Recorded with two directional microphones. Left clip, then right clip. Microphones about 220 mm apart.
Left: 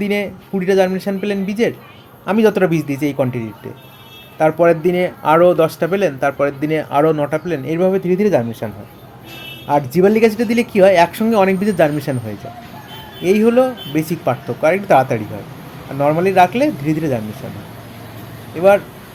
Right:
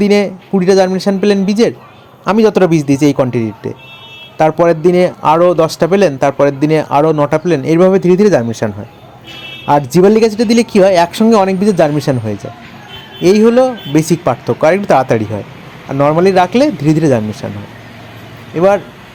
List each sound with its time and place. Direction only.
0.0 s a man's voice: 30° right (ahead or behind)
18.5 s a man's voice: 30° right (ahead or behind)